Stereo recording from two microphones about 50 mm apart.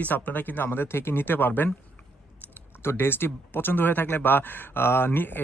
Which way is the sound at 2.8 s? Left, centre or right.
Left.